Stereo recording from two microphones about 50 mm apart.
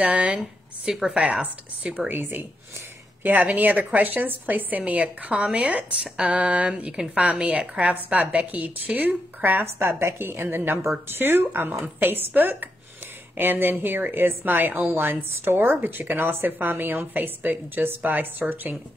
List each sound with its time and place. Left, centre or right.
0.0 s speech: right
0.8 s speech: centre
2.0 s a woman's voice: right
9.4 s a woman's voice: right